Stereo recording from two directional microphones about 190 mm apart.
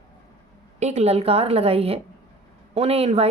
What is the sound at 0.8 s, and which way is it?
Speech, 35° right (ahead or behind).